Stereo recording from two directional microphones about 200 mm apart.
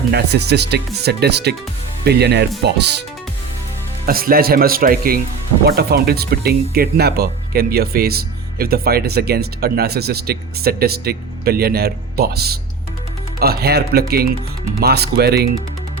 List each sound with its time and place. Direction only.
0.1 s speech: 55° right (ahead or behind)
4.0 s speech: 45° right (ahead or behind)